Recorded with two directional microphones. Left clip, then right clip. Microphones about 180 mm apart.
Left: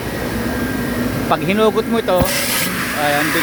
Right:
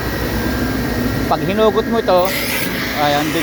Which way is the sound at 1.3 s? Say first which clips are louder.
Even; 15° left (ahead or behind).